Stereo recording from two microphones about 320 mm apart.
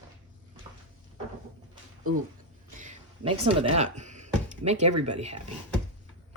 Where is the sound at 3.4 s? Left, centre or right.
Centre.